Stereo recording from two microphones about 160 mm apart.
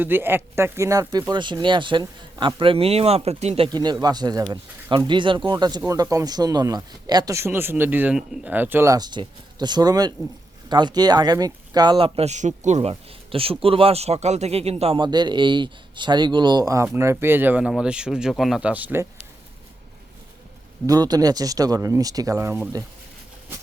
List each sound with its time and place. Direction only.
0.0 s a man's voice: 15° right (ahead or behind); by 3.7 s 40° right (ahead or behind)
3.7 s speech: 25° right (ahead or behind); by 12.9 s 45° right (ahead or behind)
12.9 s speech: 35° right (ahead or behind); by 19.0 s 10° right (ahead or behind)
20.8 s speech: 25° right (ahead or behind)